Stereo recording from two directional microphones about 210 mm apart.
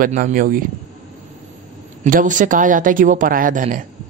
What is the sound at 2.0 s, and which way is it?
Speech, 40° right (ahead or behind).